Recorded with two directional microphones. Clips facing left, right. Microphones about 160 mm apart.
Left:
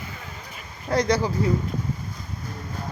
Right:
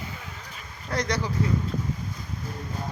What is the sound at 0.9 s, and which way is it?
Speech, 30° left (ahead or behind).